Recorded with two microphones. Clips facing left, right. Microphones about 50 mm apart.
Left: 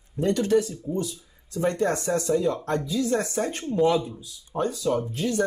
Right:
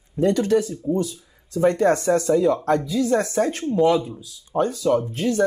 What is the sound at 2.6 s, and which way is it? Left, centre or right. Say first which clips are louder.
Speech: right 5 dB; right.